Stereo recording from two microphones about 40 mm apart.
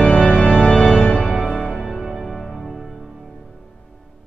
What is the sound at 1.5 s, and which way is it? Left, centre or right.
Music, centre.